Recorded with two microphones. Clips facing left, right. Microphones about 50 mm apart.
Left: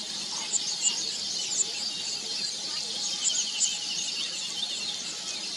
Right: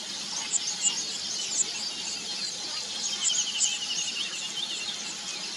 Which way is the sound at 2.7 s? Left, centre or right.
Right.